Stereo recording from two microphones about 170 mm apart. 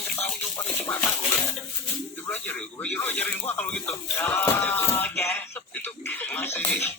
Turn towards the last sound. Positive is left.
turn(degrees=15)  # may be behind; listen again after turning